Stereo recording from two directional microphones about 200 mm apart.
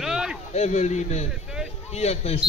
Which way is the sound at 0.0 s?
5° right (ahead or behind).